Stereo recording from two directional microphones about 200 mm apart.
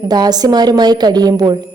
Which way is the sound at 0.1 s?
20° right (ahead or behind).